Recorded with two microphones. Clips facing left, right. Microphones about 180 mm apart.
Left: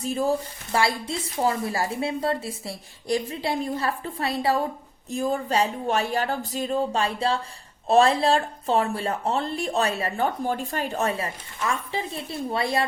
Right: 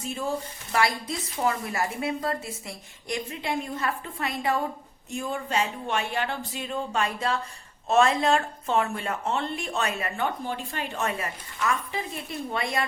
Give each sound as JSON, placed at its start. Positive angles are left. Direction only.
{"t": 0.0, "sound": "a woman's voice", "side_deg": 35}